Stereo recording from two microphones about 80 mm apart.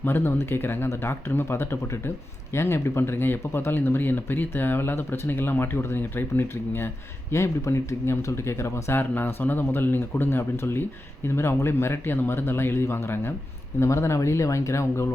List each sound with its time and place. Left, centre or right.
0.0 s speech: left